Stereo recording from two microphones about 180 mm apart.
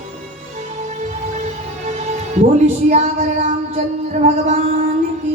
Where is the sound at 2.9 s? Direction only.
40° right (ahead or behind).